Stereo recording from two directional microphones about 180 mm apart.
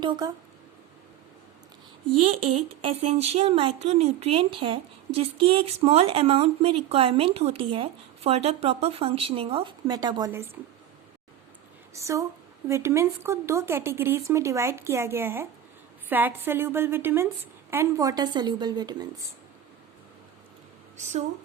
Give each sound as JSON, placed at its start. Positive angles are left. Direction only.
{"t": 0.0, "sound": "speech", "side_deg": -25}
{"t": 2.2, "sound": "speech", "side_deg": -30}
{"t": 11.9, "sound": "speech", "side_deg": -15}
{"t": 21.0, "sound": "speech", "side_deg": -40}